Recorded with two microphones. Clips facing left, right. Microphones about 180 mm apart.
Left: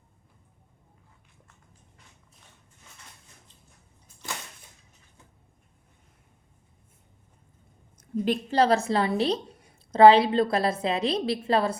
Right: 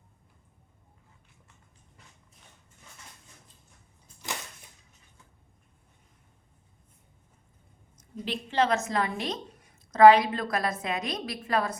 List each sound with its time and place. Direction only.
7.9 s a woman's voice: 50° left (ahead or behind); by 11.8 s 30° left (ahead or behind)